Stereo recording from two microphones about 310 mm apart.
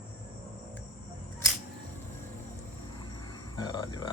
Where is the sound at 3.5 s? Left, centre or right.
Centre.